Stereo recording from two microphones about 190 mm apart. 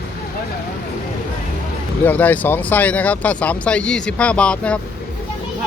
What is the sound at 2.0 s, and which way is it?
Speech, 10° left (ahead or behind).